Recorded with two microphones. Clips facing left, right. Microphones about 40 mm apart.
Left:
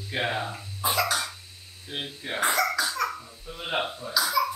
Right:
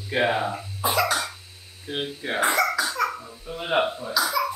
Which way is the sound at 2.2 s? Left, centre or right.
Centre.